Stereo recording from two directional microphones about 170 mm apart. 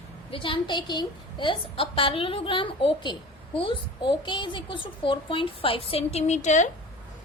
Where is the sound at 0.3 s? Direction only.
30° left (ahead or behind).